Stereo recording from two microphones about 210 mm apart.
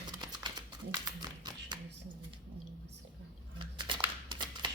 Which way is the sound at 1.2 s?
20° right (ahead or behind).